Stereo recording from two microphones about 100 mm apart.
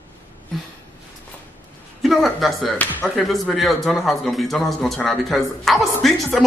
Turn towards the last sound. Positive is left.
turn(degrees=0)  # may be behind; listen again after turning